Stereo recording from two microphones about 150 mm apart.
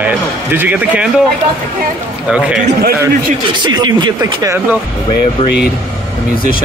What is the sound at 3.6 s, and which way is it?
Speech, 30° right (ahead or behind).